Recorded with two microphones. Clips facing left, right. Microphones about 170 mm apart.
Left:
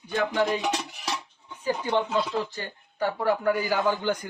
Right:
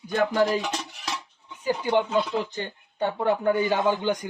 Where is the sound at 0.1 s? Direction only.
40° right (ahead or behind).